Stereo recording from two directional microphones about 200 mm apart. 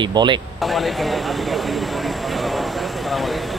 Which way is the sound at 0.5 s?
Centre (ahead or behind).